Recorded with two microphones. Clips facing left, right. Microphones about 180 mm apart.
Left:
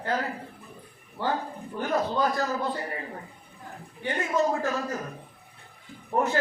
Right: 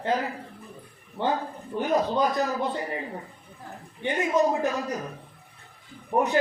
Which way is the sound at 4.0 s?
20° right (ahead or behind).